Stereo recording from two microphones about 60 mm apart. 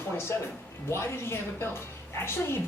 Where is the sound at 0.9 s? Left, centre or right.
Left.